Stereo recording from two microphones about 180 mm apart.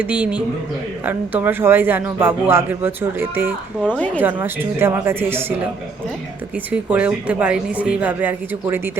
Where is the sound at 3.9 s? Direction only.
10° left (ahead or behind).